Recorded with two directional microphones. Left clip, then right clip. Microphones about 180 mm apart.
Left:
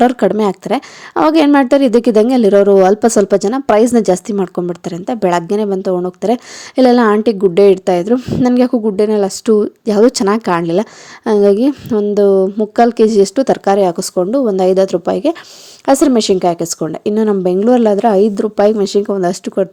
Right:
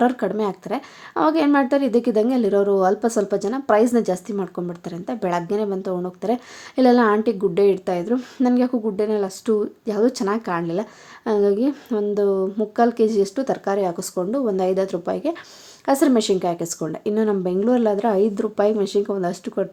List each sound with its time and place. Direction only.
0.0 s a woman's voice: 40° left (ahead or behind)
8.1 s a woman's voice: 30° left (ahead or behind)
8.4 s a woman's voice: 40° left (ahead or behind)